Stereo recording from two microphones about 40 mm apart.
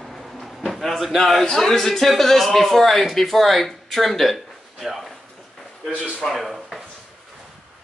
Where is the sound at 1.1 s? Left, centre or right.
Centre.